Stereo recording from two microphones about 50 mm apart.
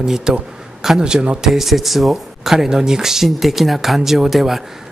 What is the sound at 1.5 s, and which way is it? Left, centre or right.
Speech, centre.